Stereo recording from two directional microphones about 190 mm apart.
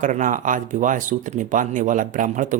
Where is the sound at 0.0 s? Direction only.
40° right (ahead or behind).